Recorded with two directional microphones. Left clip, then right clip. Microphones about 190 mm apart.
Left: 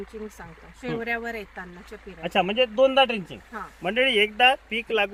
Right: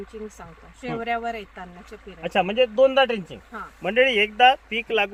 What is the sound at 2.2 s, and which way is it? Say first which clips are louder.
Speech: right 2 dB; 5° right (ahead or behind).